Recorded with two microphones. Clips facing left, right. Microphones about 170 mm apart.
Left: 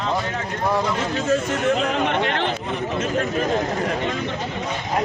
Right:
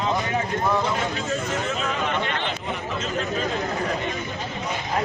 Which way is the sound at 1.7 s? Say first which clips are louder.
Left 5 dB; 70° left (ahead or behind).